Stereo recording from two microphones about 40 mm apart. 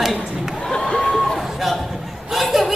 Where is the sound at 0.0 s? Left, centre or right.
Centre.